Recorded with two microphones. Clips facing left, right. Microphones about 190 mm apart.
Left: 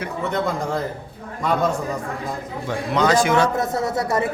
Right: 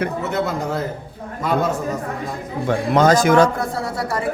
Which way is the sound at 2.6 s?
50° right (ahead or behind).